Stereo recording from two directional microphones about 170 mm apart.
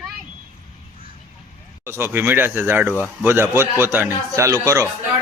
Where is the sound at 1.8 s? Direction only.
15° right (ahead or behind).